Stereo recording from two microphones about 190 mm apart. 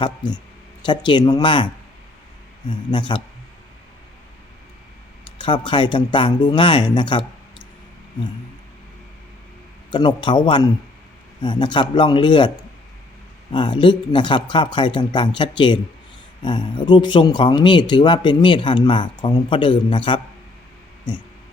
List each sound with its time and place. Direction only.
0.2 s speech: 25° left (ahead or behind)
5.4 s speech: 25° left (ahead or behind)
9.9 s speech: 25° left (ahead or behind)
13.5 s speech: 25° left (ahead or behind)